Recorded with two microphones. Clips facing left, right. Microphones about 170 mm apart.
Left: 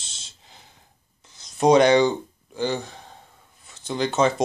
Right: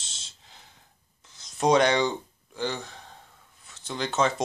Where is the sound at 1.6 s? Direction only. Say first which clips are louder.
Left 6 dB; 5° left (ahead or behind).